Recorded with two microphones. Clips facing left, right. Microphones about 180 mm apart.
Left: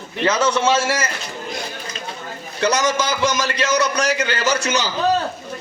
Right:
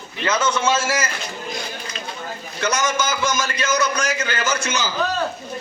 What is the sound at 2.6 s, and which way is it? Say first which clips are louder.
A man's voice: left 3 dB; 35° left (ahead or behind).